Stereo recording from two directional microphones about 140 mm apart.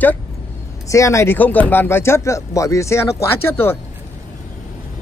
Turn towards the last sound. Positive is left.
turn(degrees=15)  # may be behind; listen again after turning